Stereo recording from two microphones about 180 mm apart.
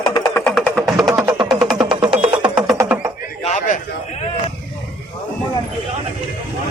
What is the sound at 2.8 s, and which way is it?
Frog, 20° right (ahead or behind).